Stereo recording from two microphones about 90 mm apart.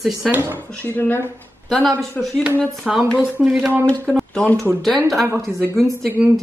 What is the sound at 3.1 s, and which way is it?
Speech, 15° right (ahead or behind).